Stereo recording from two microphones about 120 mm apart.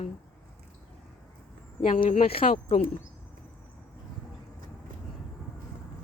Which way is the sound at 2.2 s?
55° left (ahead or behind).